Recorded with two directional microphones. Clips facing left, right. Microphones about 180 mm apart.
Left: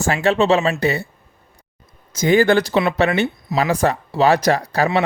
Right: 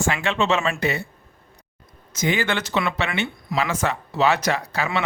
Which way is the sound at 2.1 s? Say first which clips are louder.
Left 9 dB; 40° left (ahead or behind).